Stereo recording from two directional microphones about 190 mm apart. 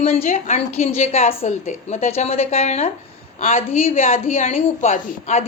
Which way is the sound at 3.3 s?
45° left (ahead or behind).